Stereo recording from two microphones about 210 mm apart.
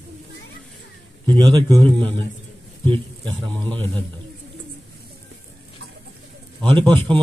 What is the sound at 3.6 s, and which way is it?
Speech, 5° left (ahead or behind).